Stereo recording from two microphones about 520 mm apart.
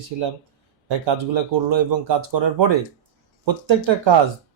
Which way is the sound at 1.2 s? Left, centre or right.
Right.